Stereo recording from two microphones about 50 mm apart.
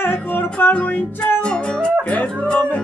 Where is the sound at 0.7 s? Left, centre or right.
Left.